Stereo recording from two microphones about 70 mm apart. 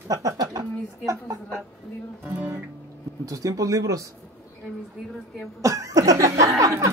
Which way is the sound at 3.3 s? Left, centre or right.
Right.